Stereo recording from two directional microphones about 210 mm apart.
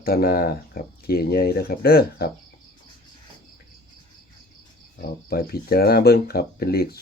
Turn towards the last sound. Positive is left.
turn(degrees=50)  # may be behind; listen again after turning